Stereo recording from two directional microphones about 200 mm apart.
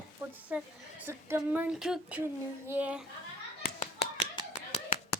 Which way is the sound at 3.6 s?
35° left (ahead or behind).